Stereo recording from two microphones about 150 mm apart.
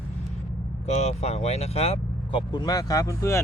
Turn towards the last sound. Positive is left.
turn(degrees=20)  # may be behind; listen again after turning